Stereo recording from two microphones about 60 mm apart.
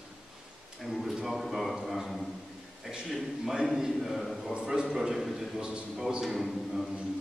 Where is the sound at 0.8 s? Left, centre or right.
Centre.